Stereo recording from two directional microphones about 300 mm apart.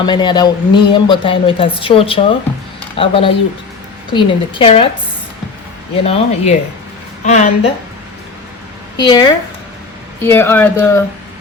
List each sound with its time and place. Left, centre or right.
0.0 s a woman's voice: centre
6.1 s speech: left
9.0 s a woman's voice: centre